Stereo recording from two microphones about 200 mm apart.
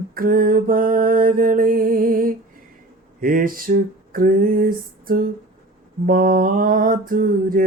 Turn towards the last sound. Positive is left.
turn(degrees=-45)  # may be behind; listen again after turning